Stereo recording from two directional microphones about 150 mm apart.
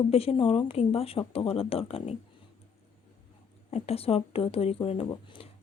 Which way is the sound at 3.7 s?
40° left (ahead or behind).